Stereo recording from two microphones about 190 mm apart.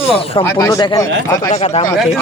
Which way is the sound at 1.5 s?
35° left (ahead or behind).